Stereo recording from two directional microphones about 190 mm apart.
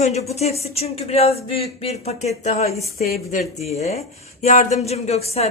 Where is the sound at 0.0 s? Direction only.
35° left (ahead or behind).